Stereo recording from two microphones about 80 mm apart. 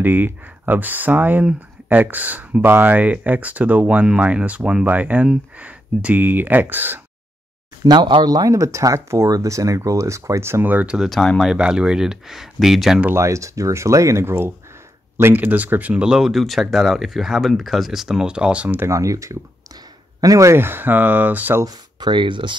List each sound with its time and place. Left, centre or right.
0.0 s speech: right
7.8 s speech: right
8.5 s speech: right
11.1 s speech: centre
11.5 s speech: centre
13.1 s speech: right; by 18.8 s centre
18.9 s speech: right
21.6 s speech: right